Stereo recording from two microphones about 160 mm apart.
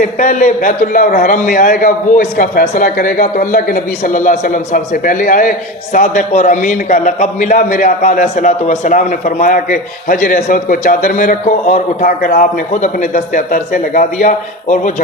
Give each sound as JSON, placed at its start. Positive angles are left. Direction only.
{"t": 0.0, "sound": "a man's voice", "side_deg": 55}